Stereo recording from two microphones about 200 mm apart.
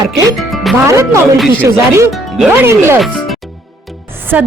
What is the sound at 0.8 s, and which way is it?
Speech, 15° right (ahead or behind).